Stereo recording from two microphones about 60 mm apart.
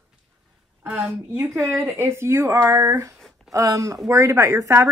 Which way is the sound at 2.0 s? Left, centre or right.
Right.